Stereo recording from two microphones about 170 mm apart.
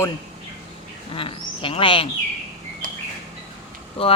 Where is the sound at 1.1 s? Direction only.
30° left (ahead or behind).